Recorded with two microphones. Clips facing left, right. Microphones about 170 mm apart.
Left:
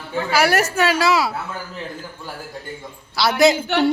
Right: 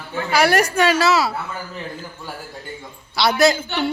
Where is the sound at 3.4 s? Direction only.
20° left (ahead or behind).